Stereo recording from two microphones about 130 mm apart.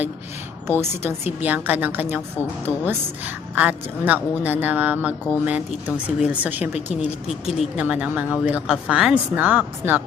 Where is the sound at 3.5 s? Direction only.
10° right (ahead or behind).